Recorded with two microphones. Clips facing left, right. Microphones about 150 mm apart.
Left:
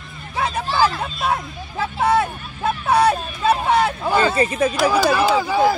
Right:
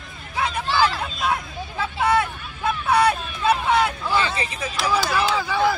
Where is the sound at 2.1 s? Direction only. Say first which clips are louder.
Left 3 dB; 35° left (ahead or behind).